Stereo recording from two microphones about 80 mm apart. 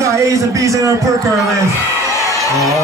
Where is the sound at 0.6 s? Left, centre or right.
Right.